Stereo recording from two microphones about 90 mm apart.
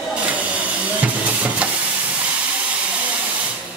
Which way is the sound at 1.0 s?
15° right (ahead or behind).